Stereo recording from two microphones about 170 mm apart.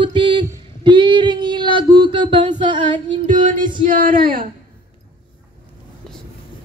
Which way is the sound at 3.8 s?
55° right (ahead or behind).